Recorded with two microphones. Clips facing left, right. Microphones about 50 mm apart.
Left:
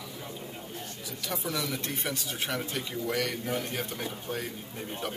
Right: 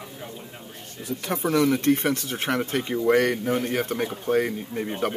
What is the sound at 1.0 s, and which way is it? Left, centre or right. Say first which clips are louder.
Speech: right 10 dB; right.